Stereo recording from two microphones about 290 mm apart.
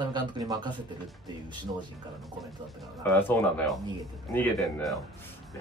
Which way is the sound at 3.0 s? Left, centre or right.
Centre.